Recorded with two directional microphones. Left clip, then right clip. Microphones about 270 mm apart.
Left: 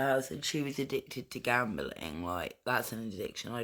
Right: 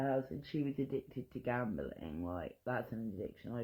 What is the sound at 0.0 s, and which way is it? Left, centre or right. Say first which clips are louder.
Speech: left 7 dB; left.